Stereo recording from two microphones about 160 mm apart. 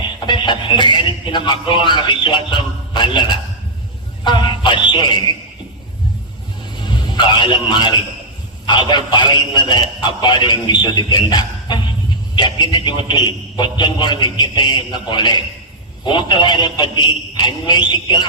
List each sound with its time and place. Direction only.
0.3 s a man's voice: 30° left (ahead or behind)
4.2 s a sound: 30° left (ahead or behind)
7.2 s a man's voice: 30° left (ahead or behind)